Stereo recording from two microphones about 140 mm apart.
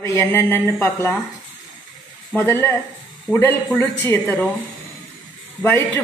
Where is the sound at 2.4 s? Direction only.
15° left (ahead or behind).